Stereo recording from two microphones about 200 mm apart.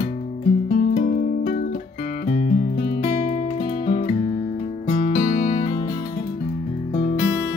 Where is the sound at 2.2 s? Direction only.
35° left (ahead or behind).